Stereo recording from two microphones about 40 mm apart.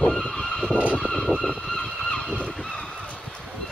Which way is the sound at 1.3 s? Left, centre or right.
Left.